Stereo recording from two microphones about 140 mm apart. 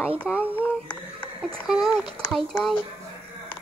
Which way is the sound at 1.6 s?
5° right (ahead or behind).